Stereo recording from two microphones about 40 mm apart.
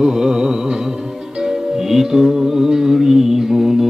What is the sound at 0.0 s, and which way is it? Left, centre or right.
Music, centre.